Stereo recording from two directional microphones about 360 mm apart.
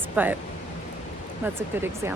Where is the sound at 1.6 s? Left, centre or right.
Centre.